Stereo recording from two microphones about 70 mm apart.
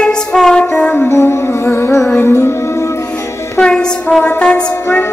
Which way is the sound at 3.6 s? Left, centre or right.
Centre.